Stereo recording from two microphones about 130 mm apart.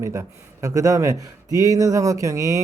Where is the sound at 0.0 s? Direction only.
25° right (ahead or behind).